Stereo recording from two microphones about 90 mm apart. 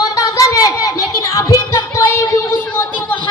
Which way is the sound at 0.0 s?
40° left (ahead or behind).